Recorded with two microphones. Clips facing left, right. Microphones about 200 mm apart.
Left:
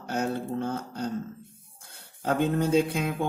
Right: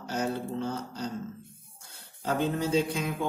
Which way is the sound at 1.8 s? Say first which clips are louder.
Left 3 dB; 55° left (ahead or behind).